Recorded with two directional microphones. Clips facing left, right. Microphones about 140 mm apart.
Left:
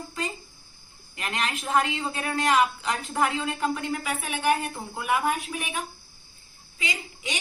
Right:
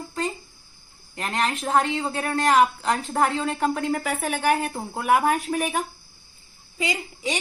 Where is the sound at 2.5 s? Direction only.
45° right (ahead or behind).